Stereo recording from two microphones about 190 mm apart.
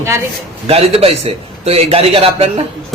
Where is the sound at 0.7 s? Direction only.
30° right (ahead or behind).